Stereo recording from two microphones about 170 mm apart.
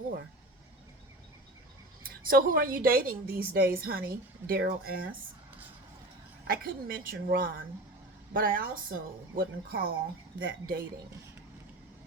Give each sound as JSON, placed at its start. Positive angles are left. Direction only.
{"t": 2.0, "sound": "a woman's voice", "side_deg": -55}
{"t": 6.5, "sound": "a woman's voice", "side_deg": -60}